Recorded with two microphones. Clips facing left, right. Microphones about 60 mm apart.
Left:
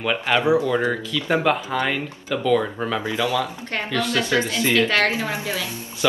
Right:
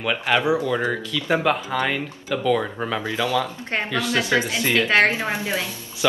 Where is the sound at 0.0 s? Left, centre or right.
Centre.